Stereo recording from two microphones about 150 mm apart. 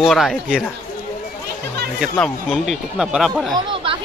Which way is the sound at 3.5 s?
35° right (ahead or behind).